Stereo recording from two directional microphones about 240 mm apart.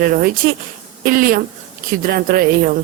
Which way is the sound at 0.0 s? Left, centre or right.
Right.